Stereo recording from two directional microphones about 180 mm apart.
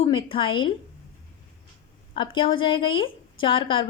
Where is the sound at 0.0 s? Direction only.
30° left (ahead or behind).